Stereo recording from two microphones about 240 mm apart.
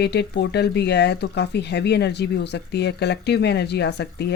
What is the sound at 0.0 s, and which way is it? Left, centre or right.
Speech, left.